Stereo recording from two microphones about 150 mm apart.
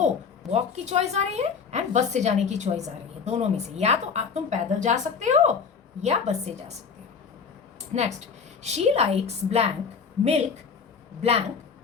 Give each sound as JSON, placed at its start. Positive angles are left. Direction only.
{"t": 0.5, "sound": "a woman's voice", "side_deg": -45}
{"t": 7.8, "sound": "a sound", "side_deg": -50}
{"t": 8.6, "sound": "a woman's voice", "side_deg": -45}
{"t": 11.2, "sound": "a woman's voice", "side_deg": -45}